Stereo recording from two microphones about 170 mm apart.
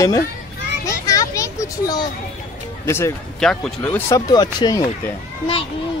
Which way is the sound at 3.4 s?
5° left (ahead or behind).